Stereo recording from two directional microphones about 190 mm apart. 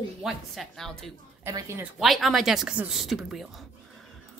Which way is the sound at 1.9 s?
Centre (ahead or behind).